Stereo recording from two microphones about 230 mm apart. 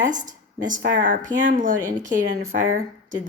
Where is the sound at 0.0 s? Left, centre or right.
Right.